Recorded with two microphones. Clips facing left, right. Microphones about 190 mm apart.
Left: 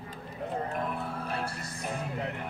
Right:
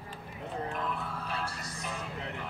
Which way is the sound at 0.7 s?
50° left (ahead or behind).